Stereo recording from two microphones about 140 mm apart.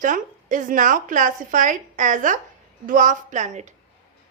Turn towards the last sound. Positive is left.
turn(degrees=-60)  # may be behind; listen again after turning